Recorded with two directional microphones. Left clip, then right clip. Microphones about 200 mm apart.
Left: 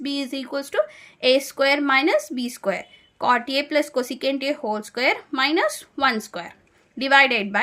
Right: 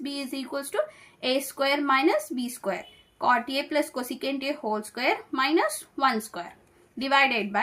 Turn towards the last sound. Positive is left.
turn(degrees=45)  # may be behind; listen again after turning